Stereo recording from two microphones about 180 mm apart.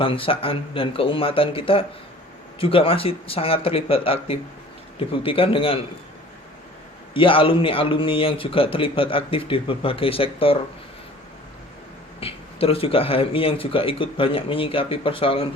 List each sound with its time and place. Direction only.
0.0 s a man's voice: 30° left (ahead or behind)
7.1 s a man's voice: 30° left (ahead or behind)
12.2 s a man's voice: 30° left (ahead or behind)